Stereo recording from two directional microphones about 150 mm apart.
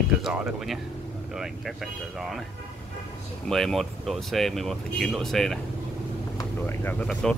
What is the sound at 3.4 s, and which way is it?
Speech, centre (ahead or behind).